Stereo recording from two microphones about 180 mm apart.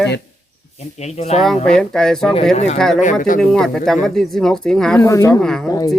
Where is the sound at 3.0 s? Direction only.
45° left (ahead or behind).